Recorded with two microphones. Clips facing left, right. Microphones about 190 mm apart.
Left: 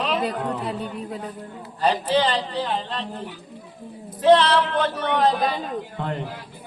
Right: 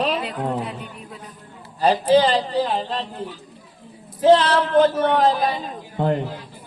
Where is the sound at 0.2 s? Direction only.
40° left (ahead or behind).